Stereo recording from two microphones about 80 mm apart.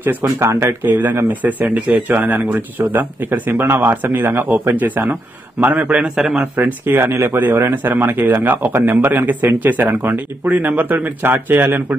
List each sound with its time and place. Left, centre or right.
0.4 s a man's voice: right; by 6.4 s centre
6.5 s speech: right